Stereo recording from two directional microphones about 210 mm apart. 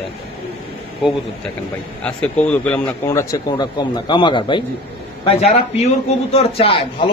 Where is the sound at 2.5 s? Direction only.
5° left (ahead or behind); by 7.0 s 25° left (ahead or behind).